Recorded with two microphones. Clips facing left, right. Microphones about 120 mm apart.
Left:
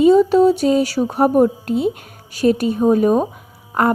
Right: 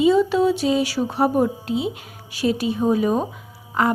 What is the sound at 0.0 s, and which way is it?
A woman's voice, 45° left (ahead or behind).